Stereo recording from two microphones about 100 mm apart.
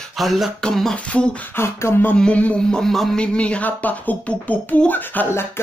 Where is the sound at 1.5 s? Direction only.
25° left (ahead or behind).